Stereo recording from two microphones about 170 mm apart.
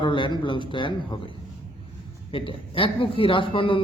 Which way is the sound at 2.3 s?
30° left (ahead or behind).